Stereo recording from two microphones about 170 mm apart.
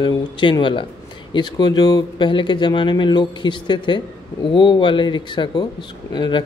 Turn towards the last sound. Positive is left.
turn(degrees=25)  # may be behind; listen again after turning